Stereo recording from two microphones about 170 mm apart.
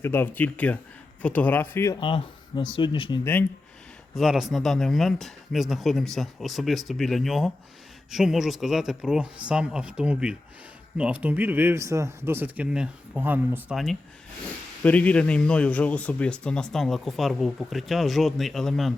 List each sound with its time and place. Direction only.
0.0 s speech: 15° left (ahead or behind)
2.0 s speech: 30° left (ahead or behind)
4.1 s speech: centre (ahead or behind)
14.8 s speech: 10° left (ahead or behind)